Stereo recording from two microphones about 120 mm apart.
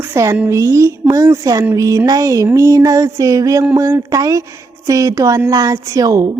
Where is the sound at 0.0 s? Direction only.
20° right (ahead or behind).